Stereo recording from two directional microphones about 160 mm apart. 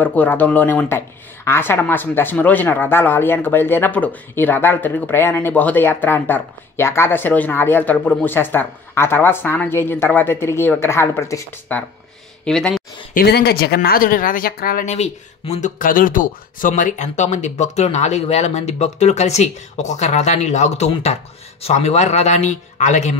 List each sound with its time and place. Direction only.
0.0 s speech: 10° left (ahead or behind)
12.4 s speech: 5° left (ahead or behind)
13.1 s speech: 80° left
13.7 s speech: 65° left (ahead or behind)
14.9 s speech: 40° left (ahead or behind)
15.8 s speech: 60° left (ahead or behind)